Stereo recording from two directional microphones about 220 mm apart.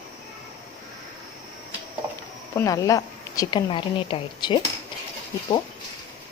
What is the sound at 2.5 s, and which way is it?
A woman's voice, 15° left (ahead or behind).